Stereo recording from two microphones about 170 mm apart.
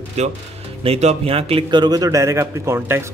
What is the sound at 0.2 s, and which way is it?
Speech, 40° right (ahead or behind).